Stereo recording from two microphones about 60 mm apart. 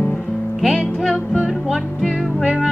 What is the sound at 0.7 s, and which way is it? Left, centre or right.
Music, centre.